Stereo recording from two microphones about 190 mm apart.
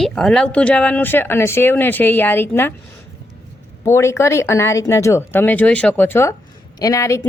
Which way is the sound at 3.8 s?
15° left (ahead or behind).